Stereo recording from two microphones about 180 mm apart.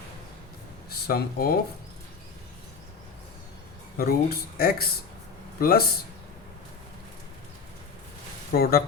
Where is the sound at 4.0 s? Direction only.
55° left (ahead or behind).